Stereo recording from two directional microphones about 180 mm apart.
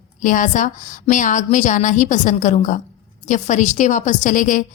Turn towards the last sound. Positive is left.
turn(degrees=45)  # may be behind; listen again after turning